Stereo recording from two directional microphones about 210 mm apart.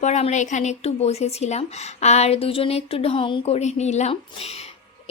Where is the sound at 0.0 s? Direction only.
35° left (ahead or behind).